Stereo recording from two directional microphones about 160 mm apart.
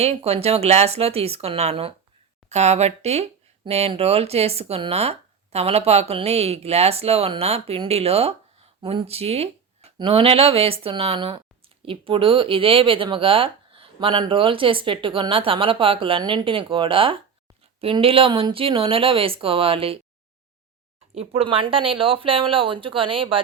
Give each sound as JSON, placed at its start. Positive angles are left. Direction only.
{"t": 0.0, "sound": "speech", "side_deg": -40}
{"t": 21.2, "sound": "speech", "side_deg": -35}